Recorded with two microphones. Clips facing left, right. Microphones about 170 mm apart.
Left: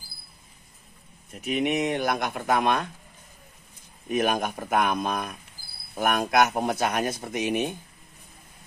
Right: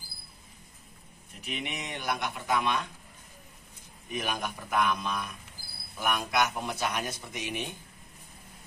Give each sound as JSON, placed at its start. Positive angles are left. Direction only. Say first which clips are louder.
{"t": 1.4, "sound": "speech", "louder": "left 13 dB", "side_deg": 50}
{"t": 4.1, "sound": "speech", "louder": "left 9 dB", "side_deg": 50}